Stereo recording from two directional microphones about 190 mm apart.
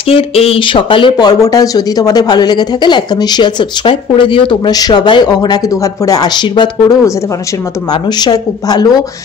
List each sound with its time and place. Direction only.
0.1 s speech: 30° left (ahead or behind)